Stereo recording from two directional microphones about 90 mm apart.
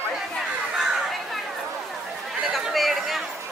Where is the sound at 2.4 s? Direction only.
Centre (ahead or behind).